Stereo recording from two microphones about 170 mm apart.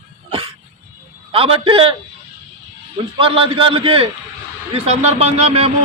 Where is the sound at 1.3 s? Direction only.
35° right (ahead or behind).